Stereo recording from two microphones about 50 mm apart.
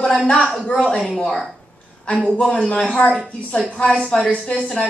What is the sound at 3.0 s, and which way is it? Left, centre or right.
A woman's voice, left.